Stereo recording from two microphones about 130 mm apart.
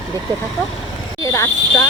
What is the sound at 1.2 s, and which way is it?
Speech, 25° left (ahead or behind).